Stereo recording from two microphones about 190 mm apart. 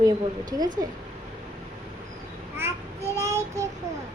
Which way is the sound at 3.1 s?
15° right (ahead or behind).